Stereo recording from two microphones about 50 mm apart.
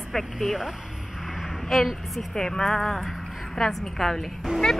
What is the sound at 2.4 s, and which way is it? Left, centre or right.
Speech, centre.